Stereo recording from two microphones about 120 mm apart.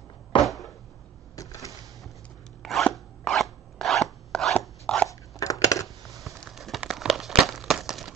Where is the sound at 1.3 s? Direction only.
30° left (ahead or behind).